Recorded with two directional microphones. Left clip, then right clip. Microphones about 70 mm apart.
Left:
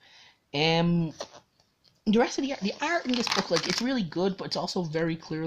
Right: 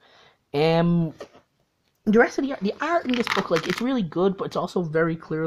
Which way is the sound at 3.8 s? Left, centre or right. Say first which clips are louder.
Right 5 dB; right.